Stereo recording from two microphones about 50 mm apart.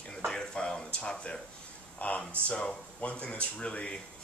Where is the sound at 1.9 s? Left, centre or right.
Left.